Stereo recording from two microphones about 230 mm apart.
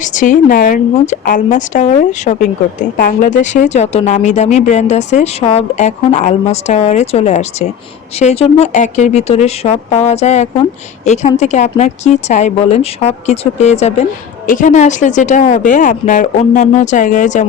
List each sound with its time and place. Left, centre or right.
0.0 s a woman's voice: left